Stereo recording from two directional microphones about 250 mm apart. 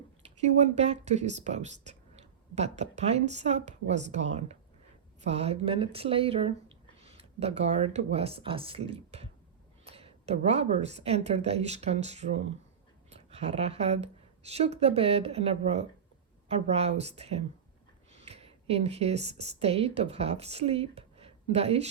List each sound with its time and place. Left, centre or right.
0.2 s a woman's voice: right